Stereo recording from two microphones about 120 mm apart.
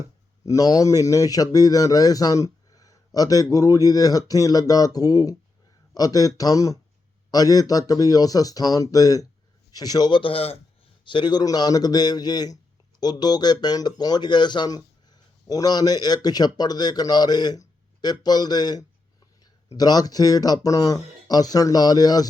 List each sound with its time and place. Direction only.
0.4 s speech: 30° left (ahead or behind); by 10.6 s 55° left (ahead or behind)
11.0 s speech: 40° left (ahead or behind)